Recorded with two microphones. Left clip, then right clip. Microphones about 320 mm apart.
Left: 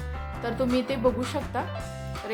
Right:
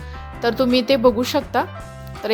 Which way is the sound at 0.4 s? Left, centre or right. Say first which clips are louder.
Right 10 dB; right.